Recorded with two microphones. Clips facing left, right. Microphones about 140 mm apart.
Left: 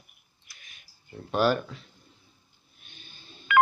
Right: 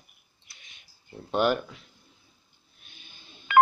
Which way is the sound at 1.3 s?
15° right (ahead or behind).